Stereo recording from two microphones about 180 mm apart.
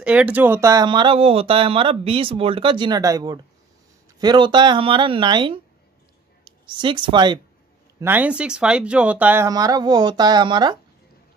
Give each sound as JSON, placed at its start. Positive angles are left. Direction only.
{"t": 0.0, "sound": "speech", "side_deg": -5}
{"t": 8.0, "sound": "speech", "side_deg": -10}
{"t": 9.5, "sound": "speech", "side_deg": -20}